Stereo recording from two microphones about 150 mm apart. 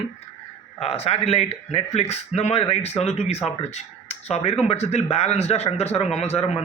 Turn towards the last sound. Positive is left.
turn(degrees=45)  # may be behind; listen again after turning